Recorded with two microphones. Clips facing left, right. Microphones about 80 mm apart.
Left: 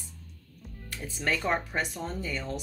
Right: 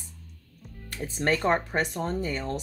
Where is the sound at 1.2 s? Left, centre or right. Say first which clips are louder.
Right 4 dB; right.